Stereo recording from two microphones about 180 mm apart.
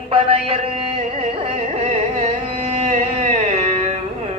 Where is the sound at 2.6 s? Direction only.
35° right (ahead or behind).